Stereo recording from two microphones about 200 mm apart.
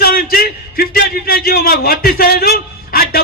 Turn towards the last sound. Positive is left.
turn(degrees=50)  # may be behind; listen again after turning